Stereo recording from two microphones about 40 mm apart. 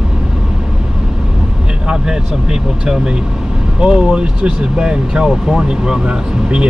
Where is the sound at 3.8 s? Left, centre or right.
Right.